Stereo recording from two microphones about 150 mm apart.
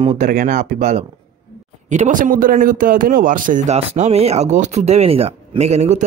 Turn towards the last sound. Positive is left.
turn(degrees=-50)  # may be behind; listen again after turning